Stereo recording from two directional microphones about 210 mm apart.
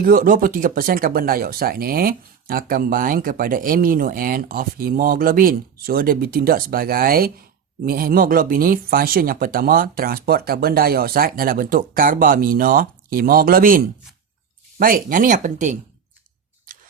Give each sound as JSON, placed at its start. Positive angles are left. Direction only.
{"t": 0.0, "sound": "speech", "side_deg": -40}